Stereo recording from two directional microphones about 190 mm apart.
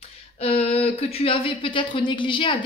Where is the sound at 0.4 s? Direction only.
30° left (ahead or behind).